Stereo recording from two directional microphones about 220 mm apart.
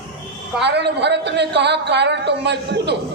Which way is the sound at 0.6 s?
50° right (ahead or behind).